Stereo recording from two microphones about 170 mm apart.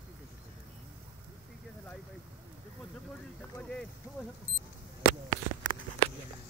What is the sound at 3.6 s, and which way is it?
Speech, 5° left (ahead or behind).